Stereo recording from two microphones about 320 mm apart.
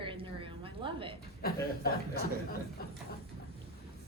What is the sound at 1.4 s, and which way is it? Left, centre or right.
Speech, left.